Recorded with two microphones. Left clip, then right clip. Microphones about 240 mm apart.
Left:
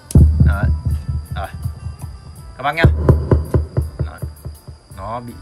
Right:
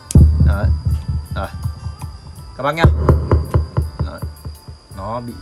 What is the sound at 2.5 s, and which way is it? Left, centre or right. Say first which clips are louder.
Speech: even; centre.